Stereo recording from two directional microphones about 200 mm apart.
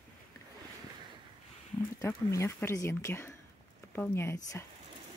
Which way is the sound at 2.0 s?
15° left (ahead or behind).